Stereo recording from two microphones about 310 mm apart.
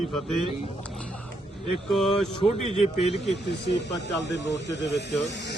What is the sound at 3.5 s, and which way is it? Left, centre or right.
Speech, left.